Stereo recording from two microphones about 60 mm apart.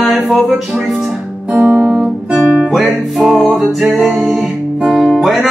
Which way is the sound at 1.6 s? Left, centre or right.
Right.